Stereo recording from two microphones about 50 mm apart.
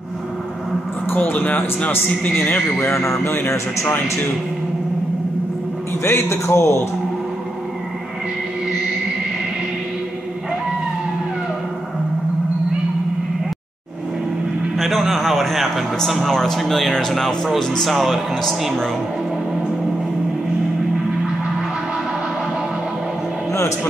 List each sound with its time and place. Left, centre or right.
1.1 s speech: left
2.8 s speech: left
3.3 s a man's voice: left
6.0 s a man's voice: left
14.8 s a sound: centre
16.3 s speech: centre
17.8 s speech: centre